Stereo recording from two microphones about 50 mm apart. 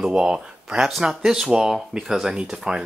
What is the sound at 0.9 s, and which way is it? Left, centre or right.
Speech, centre.